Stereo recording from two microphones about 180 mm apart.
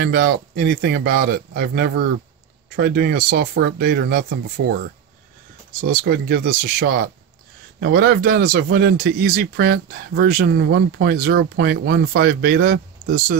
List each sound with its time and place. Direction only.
0.0 s speech: 60° right (ahead or behind)
5.7 s speech: 55° right (ahead or behind)